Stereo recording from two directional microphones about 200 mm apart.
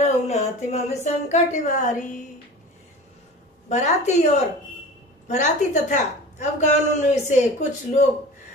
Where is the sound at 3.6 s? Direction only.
35° left (ahead or behind).